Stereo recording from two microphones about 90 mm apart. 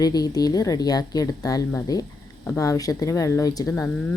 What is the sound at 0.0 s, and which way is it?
Speech, 45° left (ahead or behind).